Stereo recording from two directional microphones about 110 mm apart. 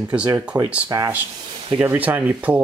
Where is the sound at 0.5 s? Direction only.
30° right (ahead or behind).